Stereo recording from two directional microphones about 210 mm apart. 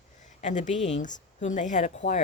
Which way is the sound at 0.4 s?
35° left (ahead or behind).